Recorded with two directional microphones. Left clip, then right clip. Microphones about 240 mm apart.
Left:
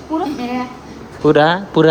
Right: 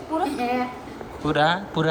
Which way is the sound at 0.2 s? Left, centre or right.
Left.